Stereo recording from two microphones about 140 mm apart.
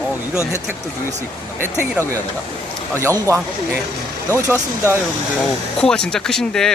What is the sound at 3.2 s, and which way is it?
Speech, 15° right (ahead or behind).